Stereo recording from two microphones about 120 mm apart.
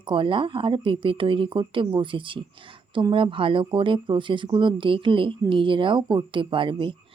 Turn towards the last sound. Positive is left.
turn(degrees=-45)  # may be behind; listen again after turning